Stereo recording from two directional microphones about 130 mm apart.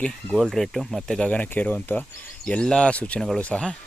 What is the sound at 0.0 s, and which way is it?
Speech, 10° left (ahead or behind).